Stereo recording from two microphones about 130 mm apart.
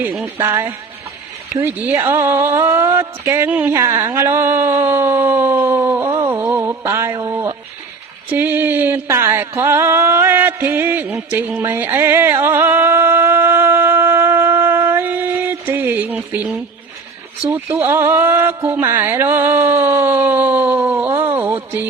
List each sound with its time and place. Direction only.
0.0 s speech: 10° right (ahead or behind)
0.3 s speech: 20° right (ahead or behind)
6.0 s a sound: 25° right (ahead or behind)
8.3 s music: 15° right (ahead or behind)
17.5 s speech: 20° right (ahead or behind)
18.8 s a sound: 20° right (ahead or behind)